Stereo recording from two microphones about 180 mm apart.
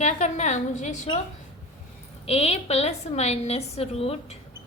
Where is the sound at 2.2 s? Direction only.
35° left (ahead or behind).